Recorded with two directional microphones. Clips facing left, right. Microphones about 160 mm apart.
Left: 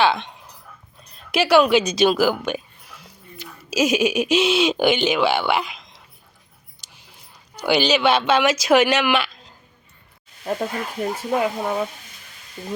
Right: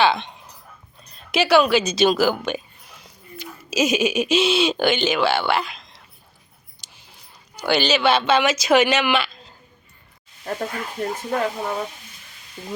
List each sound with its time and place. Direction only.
0.0 s a woman's voice: 10° left (ahead or behind)
5.1 s speech: centre (ahead or behind)
7.6 s speech: 5° left (ahead or behind)
10.4 s speech: 10° left (ahead or behind)
12.6 s speech: 15° left (ahead or behind)